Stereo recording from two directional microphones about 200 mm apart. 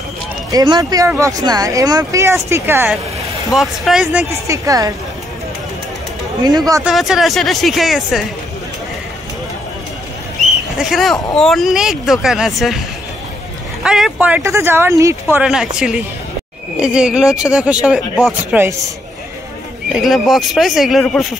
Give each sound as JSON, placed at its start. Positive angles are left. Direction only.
{"t": 0.5, "sound": "speech", "side_deg": -20}
{"t": 6.4, "sound": "speech", "side_deg": -20}
{"t": 6.8, "sound": "speech", "side_deg": 0}
{"t": 10.8, "sound": "speech", "side_deg": 0}
{"t": 13.8, "sound": "speech", "side_deg": 0}
{"t": 19.9, "sound": "speech", "side_deg": 0}